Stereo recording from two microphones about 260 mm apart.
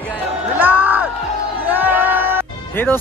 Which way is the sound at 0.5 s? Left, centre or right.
Centre.